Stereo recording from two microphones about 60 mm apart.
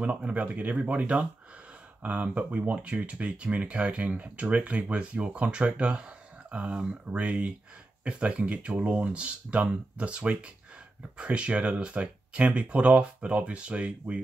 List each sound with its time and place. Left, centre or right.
0.0 s speech: right